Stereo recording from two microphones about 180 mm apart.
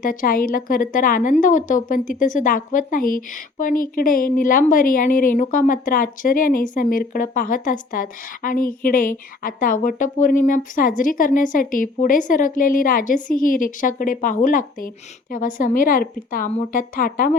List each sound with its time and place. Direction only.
0.0 s a woman's voice: 50° left (ahead or behind)